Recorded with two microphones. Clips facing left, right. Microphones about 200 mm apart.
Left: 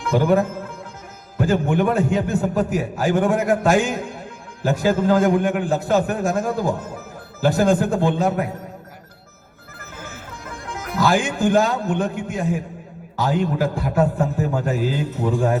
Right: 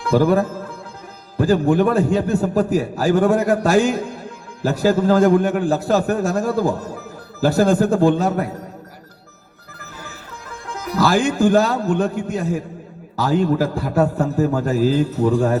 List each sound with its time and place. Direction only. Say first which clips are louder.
0.0 s a man's voice: right 2 dB; 35° right (ahead or behind)
10.7 s a man's voice: right 1 dB; 40° right (ahead or behind)